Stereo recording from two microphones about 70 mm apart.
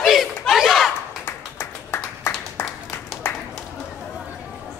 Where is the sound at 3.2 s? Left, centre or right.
Left.